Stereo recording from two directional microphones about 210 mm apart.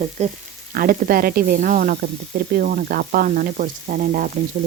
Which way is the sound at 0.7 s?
45° right (ahead or behind).